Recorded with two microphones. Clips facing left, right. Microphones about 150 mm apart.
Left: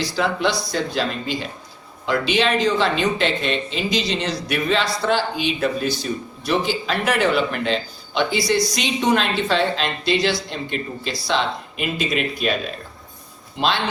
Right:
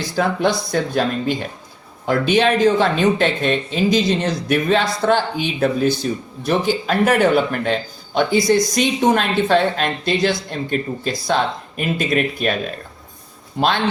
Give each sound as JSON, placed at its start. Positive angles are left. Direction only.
{"t": 0.0, "sound": "speech", "side_deg": -50}
{"t": 13.6, "sound": "speech", "side_deg": -50}